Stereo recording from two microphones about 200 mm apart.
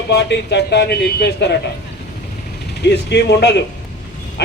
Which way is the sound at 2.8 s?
55° left (ahead or behind).